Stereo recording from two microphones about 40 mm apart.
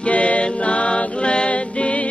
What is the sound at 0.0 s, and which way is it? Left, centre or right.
Music, left.